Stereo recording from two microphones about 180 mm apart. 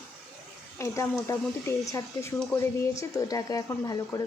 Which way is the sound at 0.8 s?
15° left (ahead or behind).